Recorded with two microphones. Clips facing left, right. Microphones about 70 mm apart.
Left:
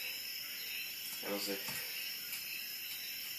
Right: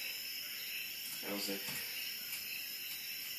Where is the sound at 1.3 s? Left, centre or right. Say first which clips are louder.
Left 2 dB; centre.